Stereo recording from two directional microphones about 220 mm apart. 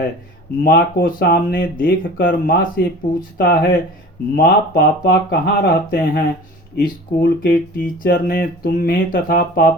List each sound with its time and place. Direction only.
0.6 s speech: 45° left (ahead or behind)